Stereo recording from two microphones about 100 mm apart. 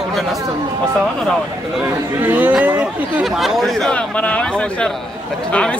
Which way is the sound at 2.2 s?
20° right (ahead or behind).